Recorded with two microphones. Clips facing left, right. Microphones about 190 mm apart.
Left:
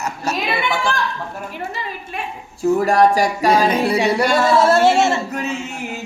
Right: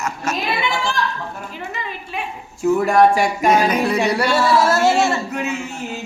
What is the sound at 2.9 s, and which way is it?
Speech, 40° left (ahead or behind).